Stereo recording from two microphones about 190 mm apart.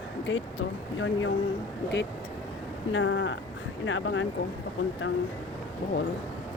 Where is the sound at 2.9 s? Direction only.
90° left.